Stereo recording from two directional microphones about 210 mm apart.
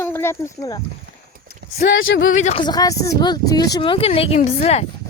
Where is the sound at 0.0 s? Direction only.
10° left (ahead or behind).